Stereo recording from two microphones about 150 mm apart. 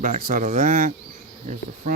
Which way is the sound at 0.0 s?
65° right (ahead or behind).